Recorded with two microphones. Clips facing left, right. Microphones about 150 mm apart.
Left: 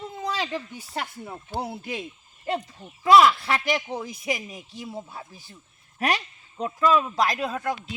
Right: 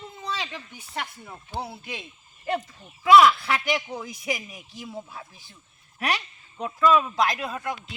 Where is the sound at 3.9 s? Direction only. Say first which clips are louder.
Left 2 dB; 25° left (ahead or behind).